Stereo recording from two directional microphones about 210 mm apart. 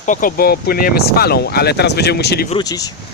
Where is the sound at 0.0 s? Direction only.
40° left (ahead or behind).